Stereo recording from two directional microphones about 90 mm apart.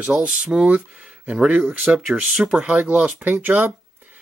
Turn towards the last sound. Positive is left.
turn(degrees=-20)  # may be behind; listen again after turning